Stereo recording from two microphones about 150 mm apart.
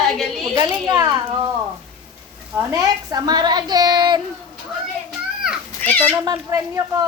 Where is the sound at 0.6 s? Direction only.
25° right (ahead or behind).